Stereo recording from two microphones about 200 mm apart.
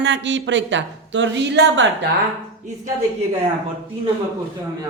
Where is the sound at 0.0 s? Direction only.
65° right (ahead or behind).